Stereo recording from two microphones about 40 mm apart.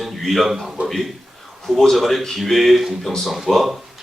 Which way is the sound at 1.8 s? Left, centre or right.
Centre.